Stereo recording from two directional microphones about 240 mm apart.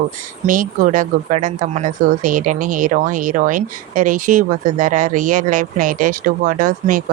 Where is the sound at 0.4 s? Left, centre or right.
Right.